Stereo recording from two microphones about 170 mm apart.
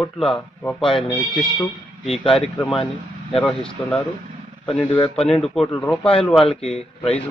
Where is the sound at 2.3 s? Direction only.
5° left (ahead or behind).